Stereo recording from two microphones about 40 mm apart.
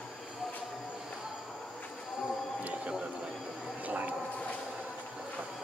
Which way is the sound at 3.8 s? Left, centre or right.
Right.